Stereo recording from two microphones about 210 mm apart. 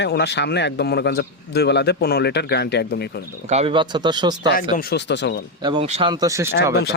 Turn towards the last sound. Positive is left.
turn(degrees=-15)  # may be behind; listen again after turning